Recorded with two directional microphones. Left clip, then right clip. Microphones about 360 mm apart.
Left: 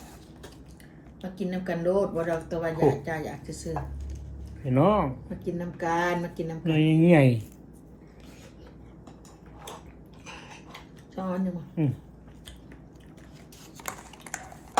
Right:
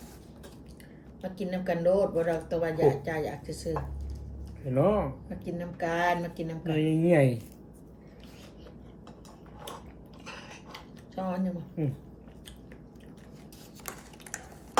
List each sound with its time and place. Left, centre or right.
1.2 s speech: centre
4.7 s speech: centre
5.4 s speech: centre
6.7 s speech: centre
10.7 s cutlery: centre
11.8 s speech: centre